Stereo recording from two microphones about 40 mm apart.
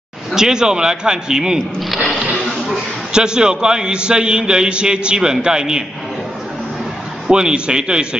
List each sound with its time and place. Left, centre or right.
0.3 s a man's voice: centre
3.1 s a man's voice: centre
7.2 s a man's voice: centre